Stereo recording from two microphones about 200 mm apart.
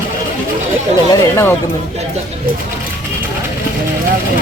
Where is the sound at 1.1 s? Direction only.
15° left (ahead or behind).